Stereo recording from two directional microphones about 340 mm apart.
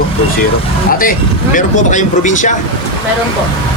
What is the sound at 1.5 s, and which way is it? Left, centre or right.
Speech, left.